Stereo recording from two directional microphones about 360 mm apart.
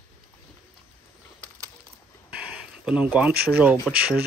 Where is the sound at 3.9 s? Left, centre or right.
Centre.